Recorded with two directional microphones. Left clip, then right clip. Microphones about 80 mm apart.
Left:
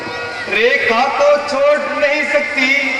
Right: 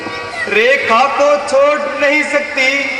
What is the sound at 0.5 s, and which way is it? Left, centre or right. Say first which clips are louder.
A man's voice: right 2 dB; right.